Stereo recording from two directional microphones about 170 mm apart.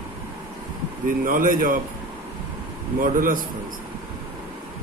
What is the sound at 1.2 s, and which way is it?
Speech, 50° right (ahead or behind).